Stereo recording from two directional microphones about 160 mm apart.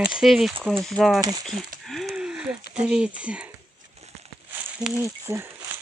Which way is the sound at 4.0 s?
45° right (ahead or behind).